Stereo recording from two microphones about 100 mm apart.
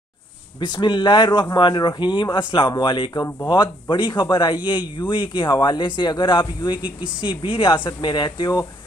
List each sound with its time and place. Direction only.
0.6 s speech: 45° left (ahead or behind)